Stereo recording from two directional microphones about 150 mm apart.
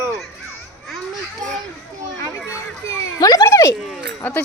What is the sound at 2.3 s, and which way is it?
Run, 20° left (ahead or behind).